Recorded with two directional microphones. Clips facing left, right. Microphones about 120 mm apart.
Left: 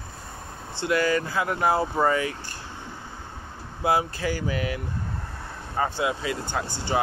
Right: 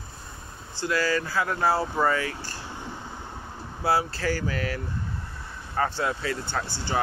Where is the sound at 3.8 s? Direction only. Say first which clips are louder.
Left 1 dB; 20° left (ahead or behind).